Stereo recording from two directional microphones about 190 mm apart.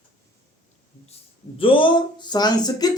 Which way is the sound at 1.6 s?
25° left (ahead or behind).